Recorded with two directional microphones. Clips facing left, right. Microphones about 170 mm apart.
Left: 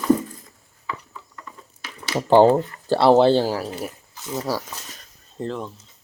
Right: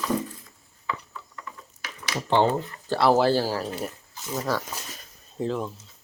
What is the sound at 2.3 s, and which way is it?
Speech, 40° left (ahead or behind).